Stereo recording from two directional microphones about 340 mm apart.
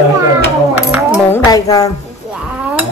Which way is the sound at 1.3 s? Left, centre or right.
Centre.